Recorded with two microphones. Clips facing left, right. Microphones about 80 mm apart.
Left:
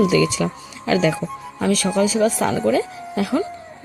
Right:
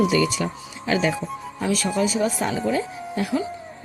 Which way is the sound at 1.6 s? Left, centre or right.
Left.